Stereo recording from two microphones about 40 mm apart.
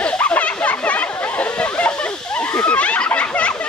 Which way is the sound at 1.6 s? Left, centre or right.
Left.